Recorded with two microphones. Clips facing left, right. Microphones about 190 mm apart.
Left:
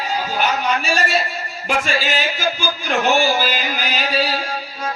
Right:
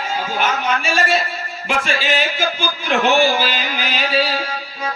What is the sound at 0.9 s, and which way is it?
A man's voice, 40° left (ahead or behind).